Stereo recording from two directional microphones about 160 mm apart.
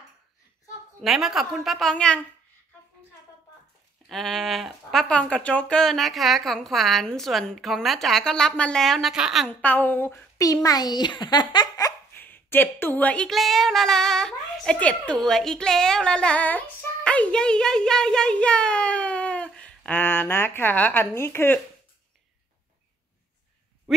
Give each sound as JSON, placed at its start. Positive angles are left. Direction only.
{"t": 1.0, "sound": "speech", "side_deg": 0}
{"t": 4.1, "sound": "speech", "side_deg": 0}
{"t": 9.5, "sound": "a woman's voice", "side_deg": 10}
{"t": 12.2, "sound": "a woman's voice", "side_deg": 10}